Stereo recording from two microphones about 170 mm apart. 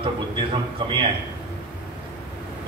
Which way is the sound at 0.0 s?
30° right (ahead or behind).